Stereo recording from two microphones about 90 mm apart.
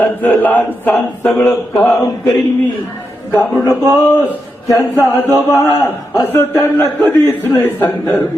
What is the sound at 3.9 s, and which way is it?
A man's voice, 20° left (ahead or behind).